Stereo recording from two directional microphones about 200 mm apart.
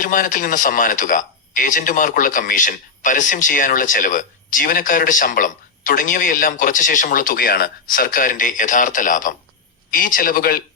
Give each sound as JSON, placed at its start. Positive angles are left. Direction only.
{"t": 0.0, "sound": "a man's voice", "side_deg": 40}